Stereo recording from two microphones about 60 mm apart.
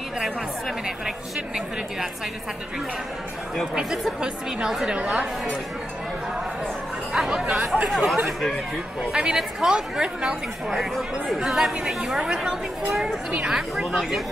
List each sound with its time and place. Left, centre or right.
4.2 s a woman's voice: centre
7.2 s chatter: centre
7.6 s speech: centre
9.1 s a woman's voice: centre
13.3 s a woman's voice: centre
13.6 s speech: centre